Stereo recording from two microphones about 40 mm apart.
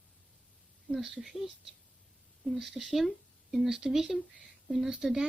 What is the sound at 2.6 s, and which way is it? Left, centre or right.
A woman's voice, centre.